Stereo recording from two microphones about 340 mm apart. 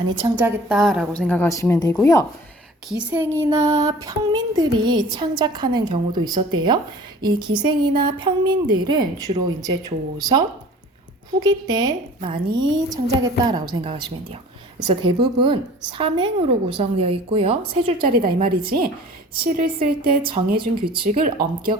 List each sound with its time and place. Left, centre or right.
0.2 s a woman's voice: centre
3.0 s child singing: centre
11.4 s child singing: centre
20.8 s speech: right